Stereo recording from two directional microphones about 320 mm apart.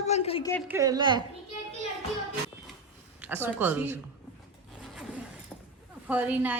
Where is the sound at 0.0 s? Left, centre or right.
Centre.